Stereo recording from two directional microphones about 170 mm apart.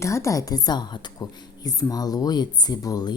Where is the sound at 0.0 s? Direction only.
15° left (ahead or behind).